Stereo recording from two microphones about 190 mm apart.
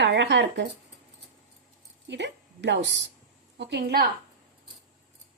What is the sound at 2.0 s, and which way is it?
A woman's voice, 65° right (ahead or behind).